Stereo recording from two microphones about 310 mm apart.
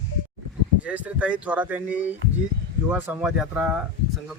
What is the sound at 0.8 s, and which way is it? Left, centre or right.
Speech, centre.